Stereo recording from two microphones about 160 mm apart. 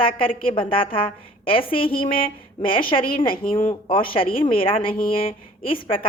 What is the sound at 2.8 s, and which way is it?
Speech, 60° left (ahead or behind).